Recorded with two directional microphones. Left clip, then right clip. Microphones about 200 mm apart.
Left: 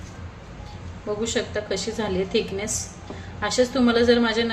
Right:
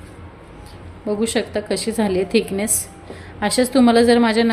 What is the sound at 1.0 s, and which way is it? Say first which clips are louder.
A woman's voice: right 5 dB; 45° right (ahead or behind).